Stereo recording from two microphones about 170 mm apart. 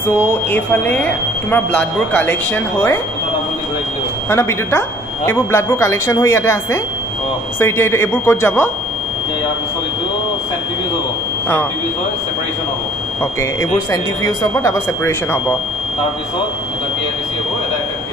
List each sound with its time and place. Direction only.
0.1 s speech: 10° left (ahead or behind)
4.3 s speech: 15° left (ahead or behind)
13.2 s speech: 15° left (ahead or behind)